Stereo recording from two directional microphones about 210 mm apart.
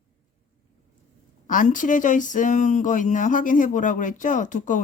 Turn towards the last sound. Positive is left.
turn(degrees=35)  # may be behind; listen again after turning